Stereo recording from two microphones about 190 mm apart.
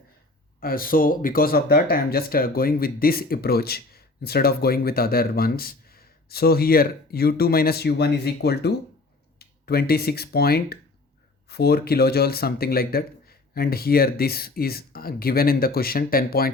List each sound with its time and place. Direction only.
0.6 s speech: 50° left (ahead or behind)